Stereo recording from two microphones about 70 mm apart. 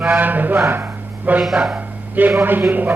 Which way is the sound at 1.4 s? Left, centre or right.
Centre.